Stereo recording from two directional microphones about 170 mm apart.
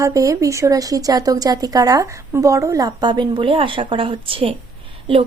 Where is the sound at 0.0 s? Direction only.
20° right (ahead or behind).